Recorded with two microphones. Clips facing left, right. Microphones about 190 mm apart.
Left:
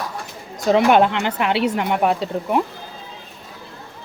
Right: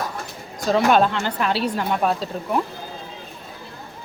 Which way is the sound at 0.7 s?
20° left (ahead or behind).